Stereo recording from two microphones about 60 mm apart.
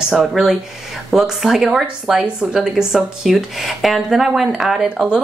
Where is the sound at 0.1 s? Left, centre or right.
Centre.